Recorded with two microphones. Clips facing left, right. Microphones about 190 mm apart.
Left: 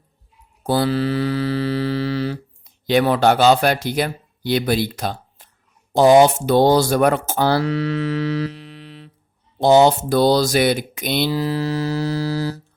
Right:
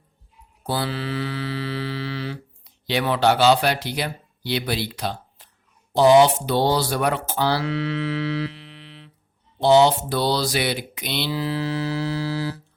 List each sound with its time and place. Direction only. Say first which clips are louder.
0.6 s mantra: left 8 dB; 45° left (ahead or behind)
5.9 s speech: left 3 dB; 45° left (ahead or behind)